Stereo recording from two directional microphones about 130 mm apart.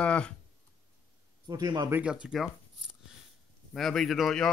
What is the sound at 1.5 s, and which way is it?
Speech, 30° right (ahead or behind).